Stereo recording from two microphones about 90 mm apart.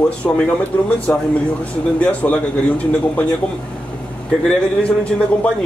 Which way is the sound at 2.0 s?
15° left (ahead or behind).